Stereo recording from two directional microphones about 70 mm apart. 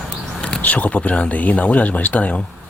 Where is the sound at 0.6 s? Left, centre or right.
Left.